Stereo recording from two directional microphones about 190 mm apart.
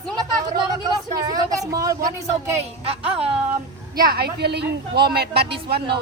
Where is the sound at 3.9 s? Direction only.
50° right (ahead or behind).